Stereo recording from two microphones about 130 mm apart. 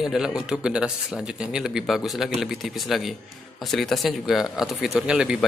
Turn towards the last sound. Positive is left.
turn(degrees=-5)  # may be behind; listen again after turning